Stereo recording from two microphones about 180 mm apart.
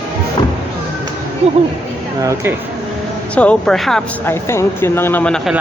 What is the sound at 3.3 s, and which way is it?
Speech, 5° left (ahead or behind).